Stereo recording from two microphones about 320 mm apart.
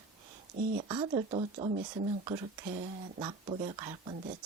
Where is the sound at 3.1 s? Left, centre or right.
Centre.